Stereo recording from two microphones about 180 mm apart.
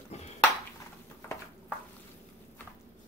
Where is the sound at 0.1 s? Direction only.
35° left (ahead or behind).